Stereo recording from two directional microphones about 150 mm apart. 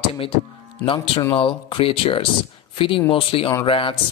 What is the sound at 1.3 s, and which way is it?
Speech, 35° left (ahead or behind).